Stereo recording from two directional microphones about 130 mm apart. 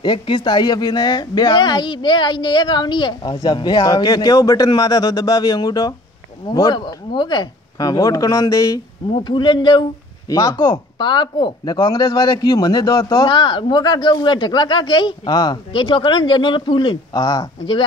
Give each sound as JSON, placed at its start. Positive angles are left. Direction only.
{"t": 0.0, "sound": "speech", "side_deg": 40}
{"t": 9.1, "sound": "speech", "side_deg": 35}
{"t": 17.2, "sound": "speech", "side_deg": 25}